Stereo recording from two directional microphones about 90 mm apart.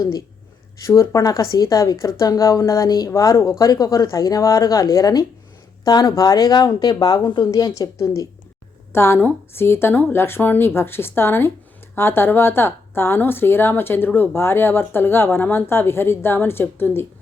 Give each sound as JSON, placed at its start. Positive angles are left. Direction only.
{"t": 0.9, "sound": "speech", "side_deg": 40}